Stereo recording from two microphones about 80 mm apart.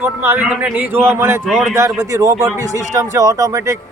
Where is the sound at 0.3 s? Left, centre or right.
Centre; by 1.4 s right.